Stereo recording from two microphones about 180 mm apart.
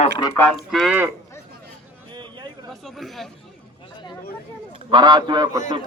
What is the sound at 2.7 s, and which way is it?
Speech, centre (ahead or behind).